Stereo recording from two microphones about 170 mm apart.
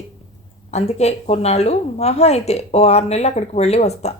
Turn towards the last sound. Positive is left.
turn(degrees=40)  # may be behind; listen again after turning